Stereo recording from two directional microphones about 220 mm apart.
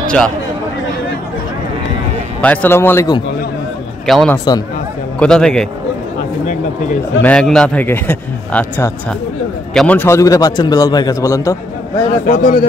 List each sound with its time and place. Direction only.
0.0 s a sound: 5° left (ahead or behind)
2.4 s a man's voice: 5° left (ahead or behind)
4.0 s a man's voice: centre (ahead or behind)
7.2 s a man's voice: 5° left (ahead or behind)
12.3 s speech: 35° left (ahead or behind)